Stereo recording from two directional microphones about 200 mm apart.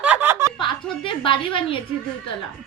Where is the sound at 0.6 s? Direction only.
25° left (ahead or behind).